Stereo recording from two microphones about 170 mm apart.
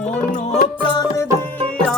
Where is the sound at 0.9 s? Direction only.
20° left (ahead or behind).